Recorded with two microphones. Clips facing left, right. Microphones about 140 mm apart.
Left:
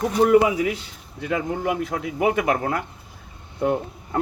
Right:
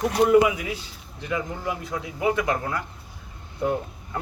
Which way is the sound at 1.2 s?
60° left (ahead or behind).